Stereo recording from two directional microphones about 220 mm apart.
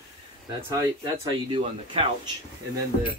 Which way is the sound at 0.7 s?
15° right (ahead or behind).